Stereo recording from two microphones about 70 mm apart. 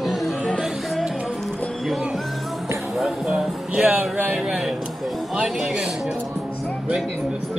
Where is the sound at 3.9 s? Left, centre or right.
Right.